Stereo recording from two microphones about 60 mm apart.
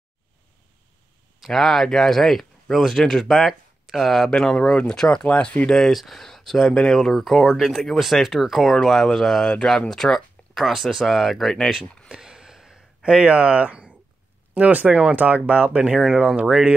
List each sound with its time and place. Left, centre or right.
1.4 s speech: centre; by 5.7 s left
5.7 s speech: centre
12.1 s a sound: centre
14.5 s speech: right